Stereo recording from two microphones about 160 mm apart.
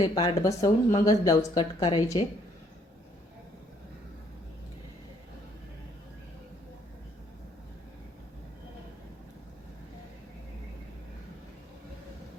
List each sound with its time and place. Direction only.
0.0 s speech: 25° left (ahead or behind)